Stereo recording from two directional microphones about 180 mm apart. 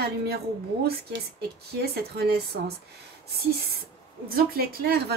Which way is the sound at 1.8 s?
60° right (ahead or behind).